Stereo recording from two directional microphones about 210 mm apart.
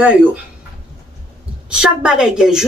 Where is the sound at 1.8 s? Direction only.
5° right (ahead or behind).